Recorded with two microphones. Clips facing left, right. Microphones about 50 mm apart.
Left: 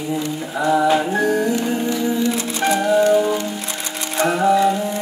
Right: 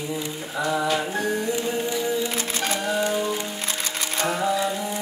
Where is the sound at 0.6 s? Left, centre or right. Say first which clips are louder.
Left 7 dB; left.